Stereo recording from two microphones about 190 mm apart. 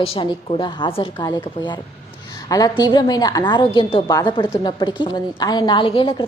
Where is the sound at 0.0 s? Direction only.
30° left (ahead or behind).